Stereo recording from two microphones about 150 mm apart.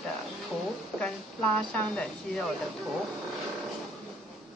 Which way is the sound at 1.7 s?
5° left (ahead or behind).